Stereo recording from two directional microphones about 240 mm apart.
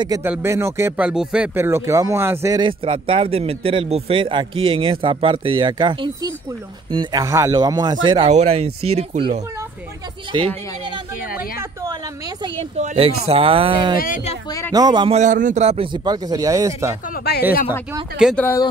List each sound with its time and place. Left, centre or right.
0.0 s speech: centre
12.7 s speech: right
13.9 s speech: left
14.7 s speech: centre
17.1 s speech: left
18.1 s speech: centre